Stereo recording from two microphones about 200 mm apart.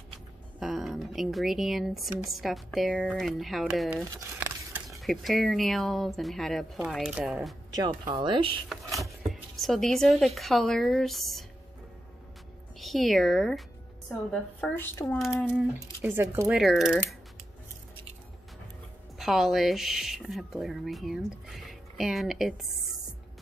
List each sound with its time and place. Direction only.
0.6 s speech: centre (ahead or behind)
4.2 s a sound: 15° right (ahead or behind)
4.8 s speech: centre (ahead or behind)
8.1 s speech: 25° right (ahead or behind)
9.3 s speech: centre (ahead or behind)
12.7 s a woman's voice: centre (ahead or behind)
16.0 s speech: 10° right (ahead or behind)
19.1 s speech: centre (ahead or behind)